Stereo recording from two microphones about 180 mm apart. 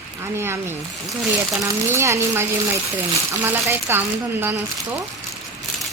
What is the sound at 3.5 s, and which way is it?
A woman's voice, 10° right (ahead or behind).